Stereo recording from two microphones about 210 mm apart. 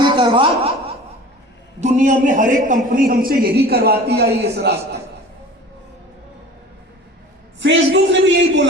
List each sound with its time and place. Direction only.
0.0 s chuckle: 20° right (ahead or behind)
1.8 s a man's voice: 35° right (ahead or behind); by 4.9 s 50° right (ahead or behind)
7.6 s a man's voice: 60° right (ahead or behind)